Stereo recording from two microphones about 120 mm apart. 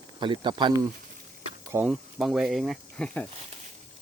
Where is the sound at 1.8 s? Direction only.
5° right (ahead or behind).